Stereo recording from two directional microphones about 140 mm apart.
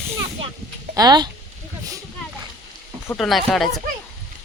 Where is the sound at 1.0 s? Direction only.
30° right (ahead or behind).